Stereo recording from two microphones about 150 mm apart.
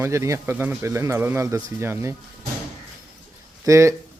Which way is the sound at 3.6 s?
20° right (ahead or behind).